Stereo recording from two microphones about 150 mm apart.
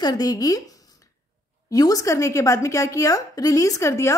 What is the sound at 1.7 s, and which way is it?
A woman's voice, 25° left (ahead or behind).